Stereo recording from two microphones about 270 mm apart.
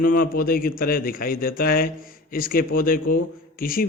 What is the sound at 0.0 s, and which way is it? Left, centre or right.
A man's voice, left.